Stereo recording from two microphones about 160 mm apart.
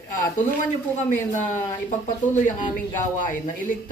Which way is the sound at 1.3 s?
50° left (ahead or behind).